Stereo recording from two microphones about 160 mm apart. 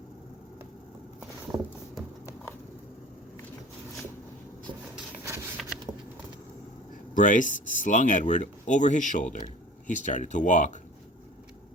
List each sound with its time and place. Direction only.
5.6 s patter: centre (ahead or behind)
7.1 s speech: 55° left (ahead or behind)